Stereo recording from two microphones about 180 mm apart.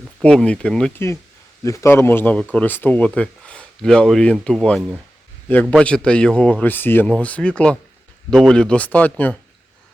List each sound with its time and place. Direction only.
0.2 s speech: 5° left (ahead or behind)